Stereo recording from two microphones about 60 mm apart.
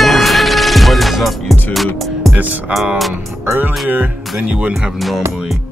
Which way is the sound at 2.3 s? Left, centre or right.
Right.